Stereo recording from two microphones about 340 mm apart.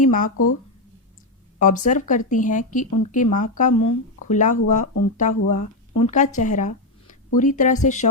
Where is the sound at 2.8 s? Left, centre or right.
Left.